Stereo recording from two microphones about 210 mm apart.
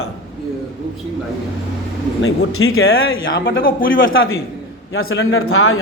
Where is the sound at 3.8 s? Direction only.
65° left (ahead or behind).